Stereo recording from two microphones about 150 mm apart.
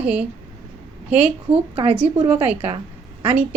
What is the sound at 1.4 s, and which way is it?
Speech, 40° right (ahead or behind).